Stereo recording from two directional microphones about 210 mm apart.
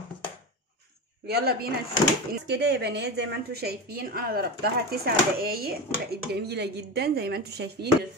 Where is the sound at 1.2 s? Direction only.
50° right (ahead or behind).